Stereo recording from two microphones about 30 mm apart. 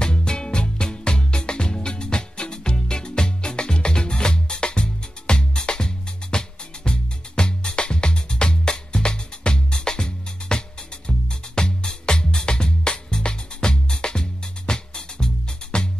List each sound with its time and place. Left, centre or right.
0.0 s music: left